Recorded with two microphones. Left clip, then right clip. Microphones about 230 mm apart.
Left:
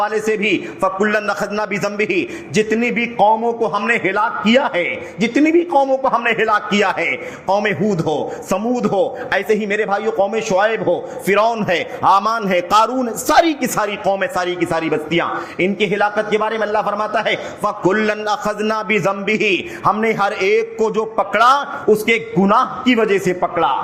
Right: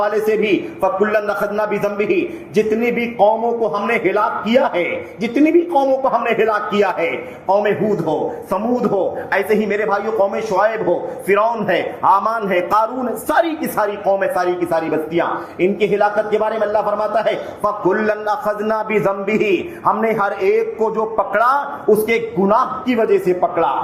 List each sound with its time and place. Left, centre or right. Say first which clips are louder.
0.0 s a man's voice: right 1 dB; left